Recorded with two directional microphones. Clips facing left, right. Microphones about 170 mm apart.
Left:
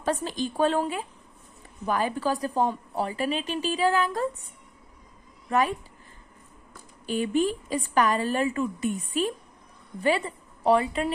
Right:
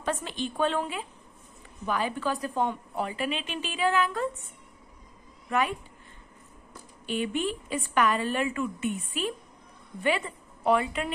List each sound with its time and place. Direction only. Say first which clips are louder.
0.0 s a woman's voice: left 3 dB; 40° left (ahead or behind)
5.5 s a woman's voice: left 3 dB; 40° left (ahead or behind)
7.1 s a woman's voice: left 4 dB; 40° left (ahead or behind)